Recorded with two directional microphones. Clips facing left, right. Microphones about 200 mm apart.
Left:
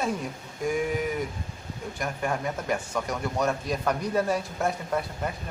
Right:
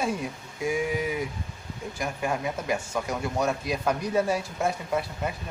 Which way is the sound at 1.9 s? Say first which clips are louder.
Even; 5° right (ahead or behind).